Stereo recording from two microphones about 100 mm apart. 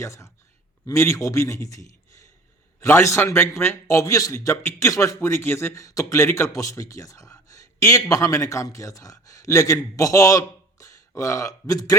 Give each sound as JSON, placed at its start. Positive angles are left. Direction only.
{"t": 0.0, "sound": "a man's voice", "side_deg": 30}